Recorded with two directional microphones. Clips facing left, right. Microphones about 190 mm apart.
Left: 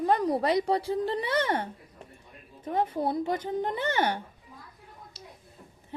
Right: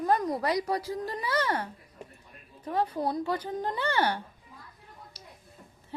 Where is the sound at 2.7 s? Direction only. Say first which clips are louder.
Left 1 dB; 25° left (ahead or behind).